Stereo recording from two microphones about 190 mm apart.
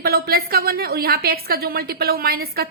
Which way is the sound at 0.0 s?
55° right (ahead or behind).